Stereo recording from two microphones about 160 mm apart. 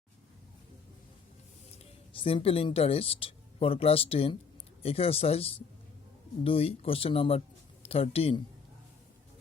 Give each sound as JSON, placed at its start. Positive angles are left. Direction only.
{"t": 2.1, "sound": "speech", "side_deg": 35}